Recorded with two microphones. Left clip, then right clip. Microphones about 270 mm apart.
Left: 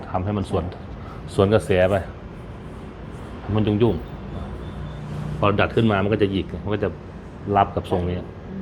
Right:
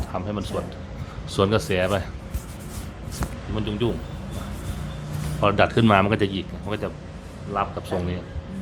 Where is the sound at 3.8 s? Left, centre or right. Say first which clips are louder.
Left 5 dB; left.